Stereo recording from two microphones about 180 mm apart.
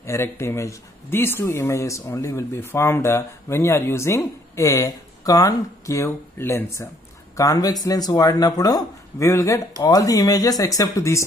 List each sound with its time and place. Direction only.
0.0 s speech: 15° left (ahead or behind)